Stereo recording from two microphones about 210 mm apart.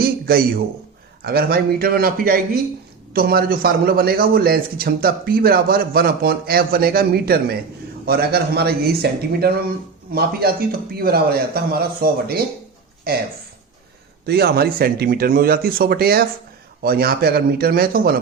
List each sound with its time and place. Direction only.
0.0 s a sound: 45° right (ahead or behind)
1.2 s a man's voice: 45° right (ahead or behind)
14.3 s a man's voice: 50° right (ahead or behind)